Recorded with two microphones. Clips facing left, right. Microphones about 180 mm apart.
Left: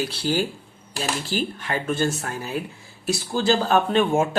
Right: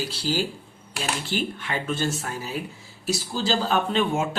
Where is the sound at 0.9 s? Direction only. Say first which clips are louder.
Left 2 dB; 40° left (ahead or behind).